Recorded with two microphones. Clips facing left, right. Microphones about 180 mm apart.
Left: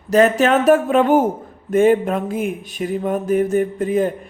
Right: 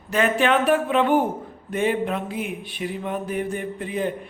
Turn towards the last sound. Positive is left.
turn(degrees=45)  # may be behind; listen again after turning